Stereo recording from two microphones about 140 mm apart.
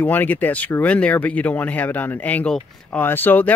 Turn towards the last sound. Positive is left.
turn(degrees=15)  # may be behind; listen again after turning